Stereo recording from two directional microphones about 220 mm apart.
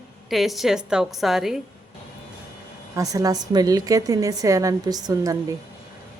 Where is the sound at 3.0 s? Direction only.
15° right (ahead or behind).